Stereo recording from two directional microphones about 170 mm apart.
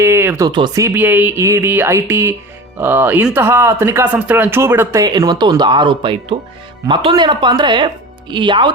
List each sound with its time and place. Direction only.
0.0 s speech: 15° right (ahead or behind)